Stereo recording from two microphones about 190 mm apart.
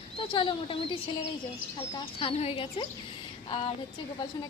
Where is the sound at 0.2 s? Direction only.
25° left (ahead or behind).